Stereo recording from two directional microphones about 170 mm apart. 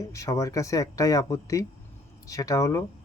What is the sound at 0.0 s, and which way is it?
Speech, 20° left (ahead or behind).